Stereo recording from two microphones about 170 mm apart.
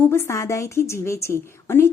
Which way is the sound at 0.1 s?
15° left (ahead or behind).